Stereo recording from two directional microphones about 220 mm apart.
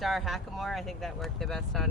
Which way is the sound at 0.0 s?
Centre (ahead or behind).